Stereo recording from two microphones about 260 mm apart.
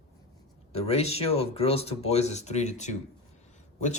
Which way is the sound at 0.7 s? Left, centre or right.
Left.